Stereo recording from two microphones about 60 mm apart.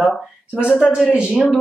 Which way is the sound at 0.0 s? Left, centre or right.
Centre.